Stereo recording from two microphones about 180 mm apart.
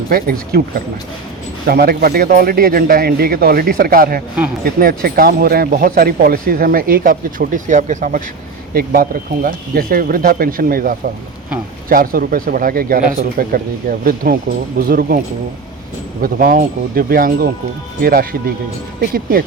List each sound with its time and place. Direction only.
0.1 s a man's voice: 55° right (ahead or behind)
1.6 s a man's voice: 60° right (ahead or behind)
8.7 s a man's voice: 55° right (ahead or behind)
16.2 s a man's voice: 50° right (ahead or behind)